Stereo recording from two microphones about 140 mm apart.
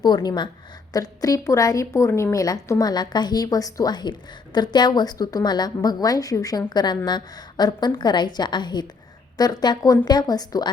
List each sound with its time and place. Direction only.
0.0 s a woman's voice: 30° left (ahead or behind)